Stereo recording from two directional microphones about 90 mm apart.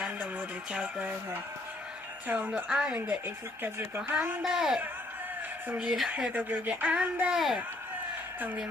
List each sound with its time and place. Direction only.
0.3 s speech: 10° right (ahead or behind)
2.2 s speech: 20° right (ahead or behind)
2.5 s speech: 10° right (ahead or behind)
3.2 s speech: 25° right (ahead or behind)
4.4 s a child's voice: 5° right (ahead or behind)
5.6 s speech: 15° right (ahead or behind)
7.3 s a child's voice: 5° right (ahead or behind)
8.4 s speech: 20° right (ahead or behind)